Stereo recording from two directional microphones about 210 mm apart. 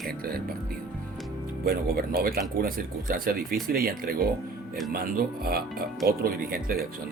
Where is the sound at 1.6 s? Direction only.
45° right (ahead or behind).